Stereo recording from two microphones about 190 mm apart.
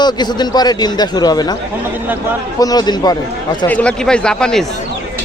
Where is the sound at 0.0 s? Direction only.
20° left (ahead or behind).